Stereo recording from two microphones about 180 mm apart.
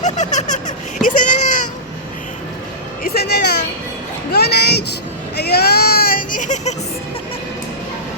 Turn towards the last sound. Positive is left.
turn(degrees=45)  # may be behind; listen again after turning